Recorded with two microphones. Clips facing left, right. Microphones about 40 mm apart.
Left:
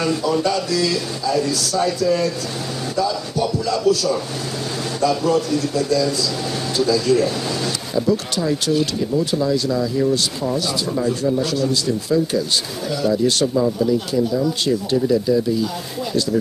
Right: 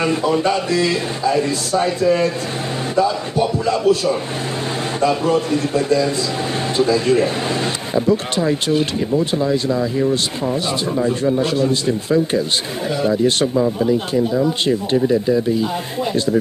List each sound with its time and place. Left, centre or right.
0.0 s speech: right